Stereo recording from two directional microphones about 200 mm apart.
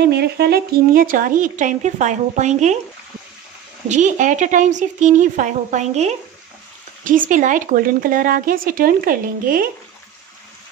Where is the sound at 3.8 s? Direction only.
35° right (ahead or behind).